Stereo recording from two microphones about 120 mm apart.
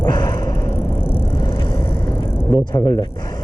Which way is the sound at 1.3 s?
40° left (ahead or behind).